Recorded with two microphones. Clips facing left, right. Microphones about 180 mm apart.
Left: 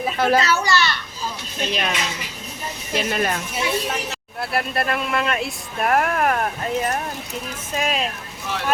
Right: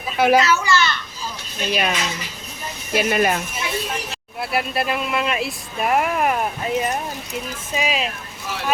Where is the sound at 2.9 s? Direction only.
10° right (ahead or behind).